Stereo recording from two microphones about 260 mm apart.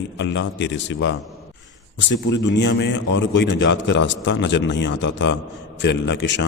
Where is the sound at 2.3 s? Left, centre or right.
Left.